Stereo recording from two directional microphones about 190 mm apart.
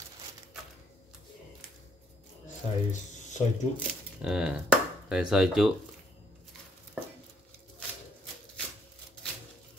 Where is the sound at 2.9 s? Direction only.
40° left (ahead or behind).